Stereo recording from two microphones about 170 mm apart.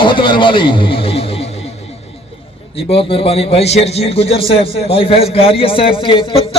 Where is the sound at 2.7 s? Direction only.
35° left (ahead or behind).